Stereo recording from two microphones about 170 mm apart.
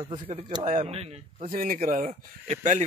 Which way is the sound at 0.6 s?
45° right (ahead or behind).